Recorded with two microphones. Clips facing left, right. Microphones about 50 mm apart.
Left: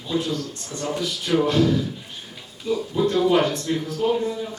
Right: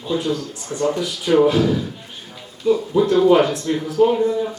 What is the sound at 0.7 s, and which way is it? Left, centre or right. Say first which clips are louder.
Speech: right 10 dB; right.